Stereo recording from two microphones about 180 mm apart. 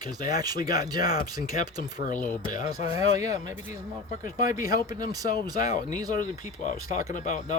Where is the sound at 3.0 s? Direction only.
20° right (ahead or behind).